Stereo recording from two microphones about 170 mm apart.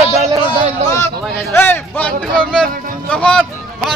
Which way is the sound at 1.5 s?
10° left (ahead or behind).